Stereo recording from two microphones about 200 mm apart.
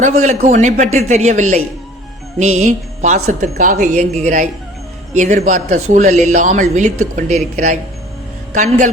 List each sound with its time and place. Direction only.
0.0 s speech: 35° right (ahead or behind)